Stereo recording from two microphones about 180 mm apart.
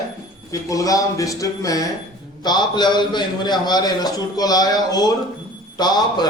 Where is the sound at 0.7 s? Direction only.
20° left (ahead or behind).